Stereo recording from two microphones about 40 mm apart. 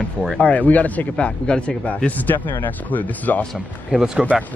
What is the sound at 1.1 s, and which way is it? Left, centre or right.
Speech, left.